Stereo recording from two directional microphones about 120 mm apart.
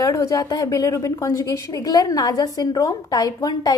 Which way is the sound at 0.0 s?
30° left (ahead or behind).